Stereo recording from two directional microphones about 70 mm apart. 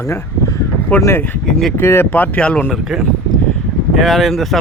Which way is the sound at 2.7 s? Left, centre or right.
Centre.